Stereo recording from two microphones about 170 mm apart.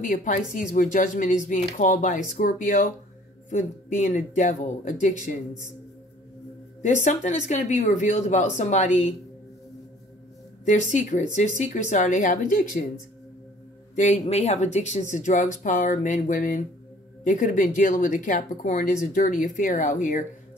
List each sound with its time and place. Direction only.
0.0 s speech: 50° left (ahead or behind)
6.8 s speech: 45° left (ahead or behind)
10.9 s speech: 45° left (ahead or behind)
13.9 s speech: 40° left (ahead or behind)